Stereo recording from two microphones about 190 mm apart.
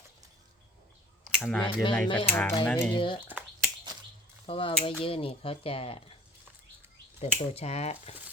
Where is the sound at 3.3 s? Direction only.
5° right (ahead or behind).